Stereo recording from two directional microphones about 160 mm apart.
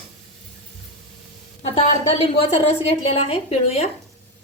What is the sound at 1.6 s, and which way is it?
A woman's voice, 40° left (ahead or behind).